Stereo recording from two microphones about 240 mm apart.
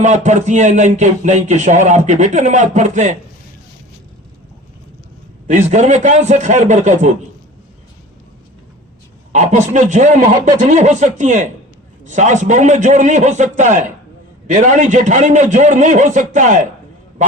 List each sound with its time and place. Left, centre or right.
0.0 s a man's voice: right
5.5 s a man's voice: right
9.3 s a man's voice: right